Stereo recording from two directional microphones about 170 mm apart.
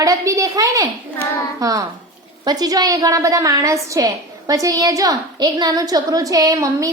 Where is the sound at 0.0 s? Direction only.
20° right (ahead or behind).